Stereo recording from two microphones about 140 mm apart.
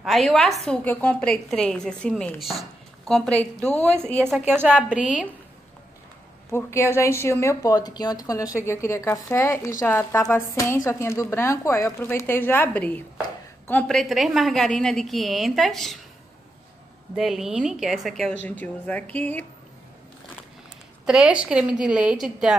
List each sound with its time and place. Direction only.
0.0 s a woman's voice: centre (ahead or behind)
4.5 s a woman's voice: 15° right (ahead or behind)
6.5 s a woman's voice: 20° left (ahead or behind); by 16.0 s centre (ahead or behind)
17.1 s a woman's voice: centre (ahead or behind)
21.0 s a woman's voice: 5° right (ahead or behind)